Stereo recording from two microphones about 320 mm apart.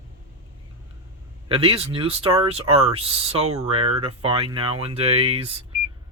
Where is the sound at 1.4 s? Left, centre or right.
Centre.